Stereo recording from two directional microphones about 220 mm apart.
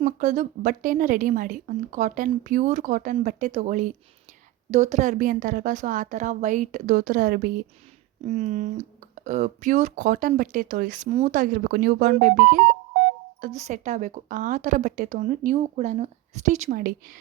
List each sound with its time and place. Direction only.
0.0 s a woman's voice: 35° right (ahead or behind)